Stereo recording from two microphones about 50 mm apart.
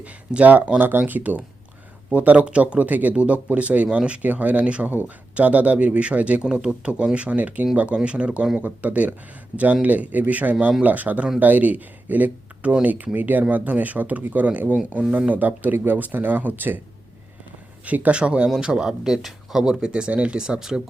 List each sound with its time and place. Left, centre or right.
0.4 s speech: right
2.4 s speech: right
2.7 s speech: right
6.4 s speech: centre; by 16.8 s right
17.8 s speech: right
18.2 s speech: right